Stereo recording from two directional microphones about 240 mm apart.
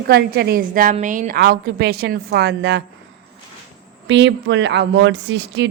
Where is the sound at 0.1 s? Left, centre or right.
Right.